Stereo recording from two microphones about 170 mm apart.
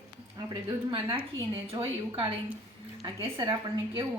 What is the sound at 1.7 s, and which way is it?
A woman's voice, 25° right (ahead or behind).